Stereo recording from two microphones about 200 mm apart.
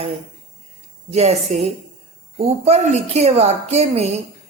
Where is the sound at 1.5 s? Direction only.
35° right (ahead or behind).